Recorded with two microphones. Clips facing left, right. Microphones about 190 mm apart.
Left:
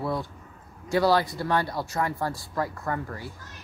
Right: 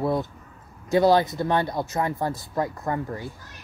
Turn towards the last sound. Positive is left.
turn(degrees=-20)  # may be behind; listen again after turning